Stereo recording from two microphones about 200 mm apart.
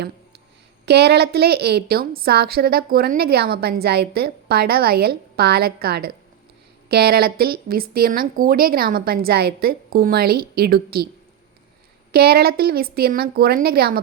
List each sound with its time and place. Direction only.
0.9 s a woman's voice: 55° right (ahead or behind)
12.1 s a woman's voice: 50° right (ahead or behind)